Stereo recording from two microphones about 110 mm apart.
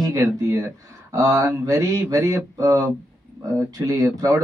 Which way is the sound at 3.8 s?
30° right (ahead or behind).